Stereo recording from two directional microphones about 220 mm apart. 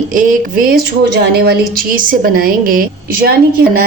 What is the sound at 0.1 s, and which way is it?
Speech, 40° right (ahead or behind).